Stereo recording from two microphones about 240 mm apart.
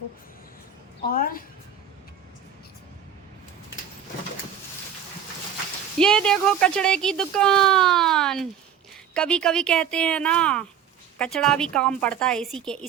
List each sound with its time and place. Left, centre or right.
1.1 s a woman's voice: left
6.0 s speech: centre